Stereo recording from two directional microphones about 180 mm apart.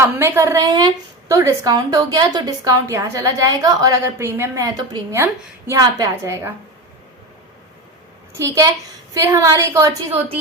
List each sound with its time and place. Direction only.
0.0 s a woman's voice: 15° right (ahead or behind)
8.4 s a woman's voice: 15° right (ahead or behind)